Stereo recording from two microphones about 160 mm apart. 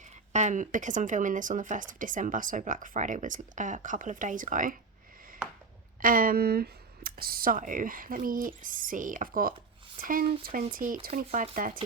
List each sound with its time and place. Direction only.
0.0 s speech: 50° right (ahead or behind)
6.0 s speech: 60° right (ahead or behind)